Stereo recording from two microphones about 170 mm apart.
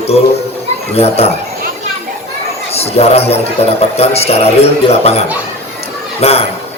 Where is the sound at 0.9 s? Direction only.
35° left (ahead or behind).